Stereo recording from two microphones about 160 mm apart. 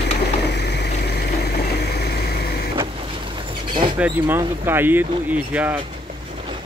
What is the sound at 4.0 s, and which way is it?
Speech, 15° right (ahead or behind).